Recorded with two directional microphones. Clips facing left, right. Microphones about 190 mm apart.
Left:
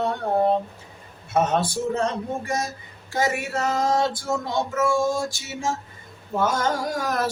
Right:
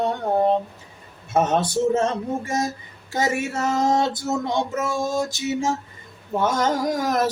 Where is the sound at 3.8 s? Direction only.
20° right (ahead or behind).